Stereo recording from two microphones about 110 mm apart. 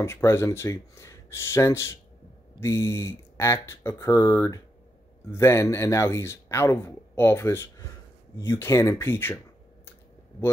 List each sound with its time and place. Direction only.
0.0 s speech: 25° left (ahead or behind)